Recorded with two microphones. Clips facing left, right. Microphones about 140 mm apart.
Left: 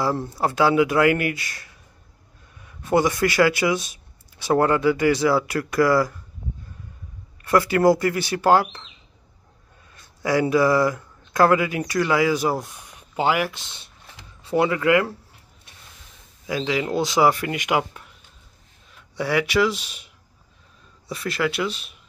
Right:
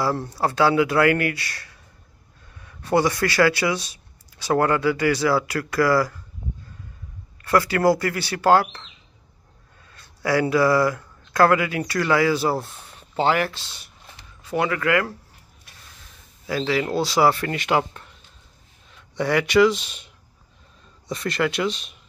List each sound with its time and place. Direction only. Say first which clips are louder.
0.3 s speech: even; 20° left (ahead or behind)
7.4 s speech: left 1 dB; 20° left (ahead or behind)
9.9 s speech: even; 20° left (ahead or behind)
16.4 s speech: right 1 dB; 15° left (ahead or behind)
19.1 s speech: right 3 dB; 5° left (ahead or behind)
21.1 s speech: right 1 dB; 5° left (ahead or behind)